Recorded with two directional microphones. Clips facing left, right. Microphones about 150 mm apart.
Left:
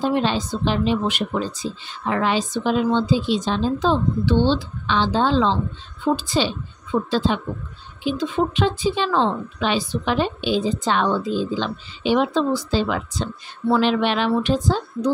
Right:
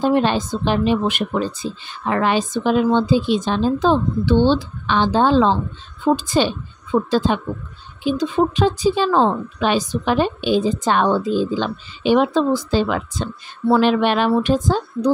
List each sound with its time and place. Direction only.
0.0 s a woman's voice: 50° right (ahead or behind)